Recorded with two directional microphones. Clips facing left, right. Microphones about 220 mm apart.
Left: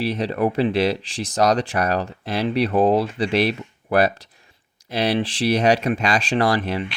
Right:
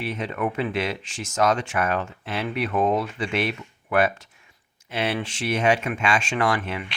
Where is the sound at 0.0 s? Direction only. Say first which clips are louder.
Left 6 dB; 35° left (ahead or behind).